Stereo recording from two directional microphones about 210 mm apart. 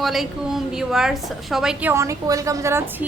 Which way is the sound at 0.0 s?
Centre (ahead or behind).